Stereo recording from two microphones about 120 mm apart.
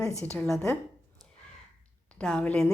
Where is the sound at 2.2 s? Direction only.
5° left (ahead or behind).